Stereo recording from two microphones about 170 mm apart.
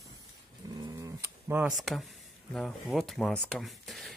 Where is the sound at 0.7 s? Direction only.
20° right (ahead or behind).